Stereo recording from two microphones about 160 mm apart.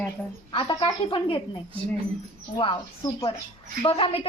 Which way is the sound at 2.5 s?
30° left (ahead or behind).